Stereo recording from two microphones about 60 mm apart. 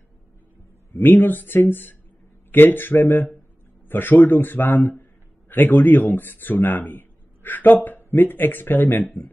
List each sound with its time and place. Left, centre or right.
0.9 s speech: left